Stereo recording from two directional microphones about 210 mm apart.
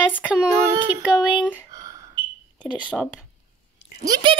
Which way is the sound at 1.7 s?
15° right (ahead or behind).